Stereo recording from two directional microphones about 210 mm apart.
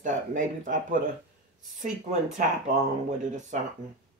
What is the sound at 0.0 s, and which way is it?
Speech, 40° right (ahead or behind).